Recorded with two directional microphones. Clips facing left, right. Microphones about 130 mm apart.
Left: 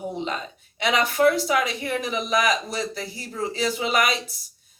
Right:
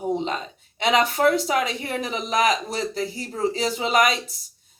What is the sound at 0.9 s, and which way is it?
Speech, 35° right (ahead or behind).